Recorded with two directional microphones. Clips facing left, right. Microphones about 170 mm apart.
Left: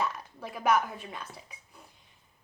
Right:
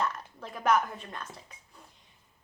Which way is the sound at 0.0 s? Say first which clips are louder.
Even; 5° left (ahead or behind).